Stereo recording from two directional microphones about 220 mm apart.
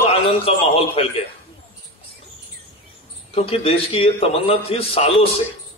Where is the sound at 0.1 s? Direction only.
25° left (ahead or behind).